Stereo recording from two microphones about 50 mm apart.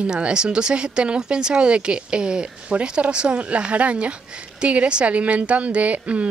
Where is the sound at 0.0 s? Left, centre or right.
Right.